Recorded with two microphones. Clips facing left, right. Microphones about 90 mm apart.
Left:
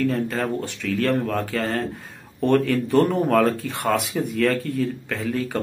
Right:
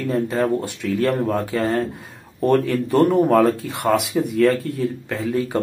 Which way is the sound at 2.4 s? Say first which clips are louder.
Right 1 dB; 5° right (ahead or behind).